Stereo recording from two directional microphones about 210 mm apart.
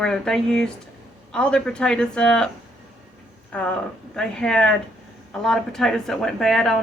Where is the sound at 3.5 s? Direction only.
5° left (ahead or behind).